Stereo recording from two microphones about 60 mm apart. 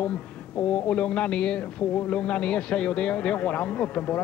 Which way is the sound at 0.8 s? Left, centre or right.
Centre.